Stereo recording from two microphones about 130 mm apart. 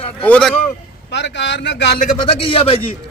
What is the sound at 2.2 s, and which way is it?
Speech, 45° left (ahead or behind).